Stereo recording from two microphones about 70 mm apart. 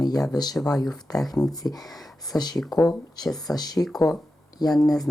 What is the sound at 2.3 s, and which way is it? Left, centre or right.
Speech, left.